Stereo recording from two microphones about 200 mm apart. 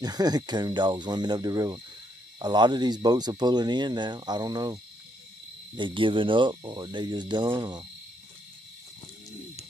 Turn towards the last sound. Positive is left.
turn(degrees=-20)  # may be behind; listen again after turning